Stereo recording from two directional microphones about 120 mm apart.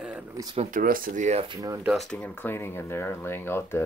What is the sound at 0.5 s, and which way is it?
Speech, 90° right.